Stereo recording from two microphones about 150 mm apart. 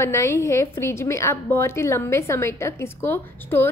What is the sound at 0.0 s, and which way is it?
A woman's voice, 20° left (ahead or behind).